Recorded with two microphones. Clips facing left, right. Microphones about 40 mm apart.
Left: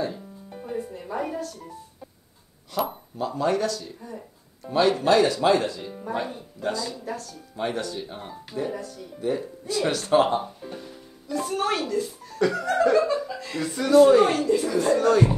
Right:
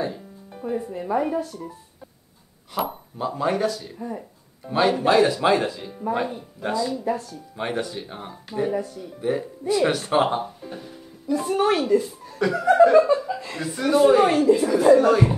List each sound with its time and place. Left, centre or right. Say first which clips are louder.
0.7 s speech: right 3 dB; right
1.1 s speech: right 6 dB; centre
2.7 s speech: right 1 dB; centre